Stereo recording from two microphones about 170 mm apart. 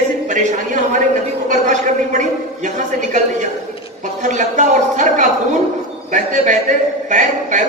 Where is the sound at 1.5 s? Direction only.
45° right (ahead or behind).